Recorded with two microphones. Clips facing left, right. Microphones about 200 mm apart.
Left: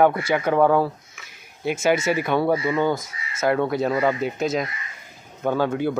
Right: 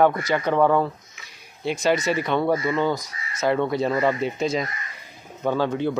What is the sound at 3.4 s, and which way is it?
Speech, 5° left (ahead or behind).